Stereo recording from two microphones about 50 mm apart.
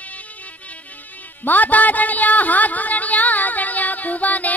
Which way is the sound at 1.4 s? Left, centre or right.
Left.